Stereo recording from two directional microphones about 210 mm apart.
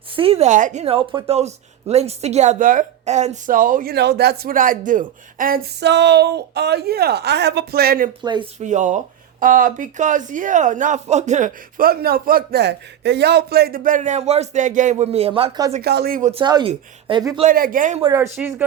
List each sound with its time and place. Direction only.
0.2 s a woman's voice: 30° right (ahead or behind); by 8.1 s 45° right (ahead or behind)
8.2 s speech: 20° right (ahead or behind)
8.5 s a woman's voice: 35° right (ahead or behind)
15.8 s speech: 50° right (ahead or behind)
16.3 s speech: 20° right (ahead or behind)
17.5 s a woman's voice: 40° right (ahead or behind)
18.0 s speech: 15° right (ahead or behind)